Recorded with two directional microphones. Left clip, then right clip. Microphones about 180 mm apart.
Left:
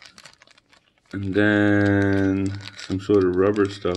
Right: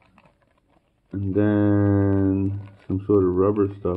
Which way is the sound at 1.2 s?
15° left (ahead or behind).